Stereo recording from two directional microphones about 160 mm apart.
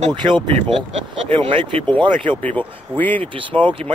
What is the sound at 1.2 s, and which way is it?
Speech, 40° right (ahead or behind).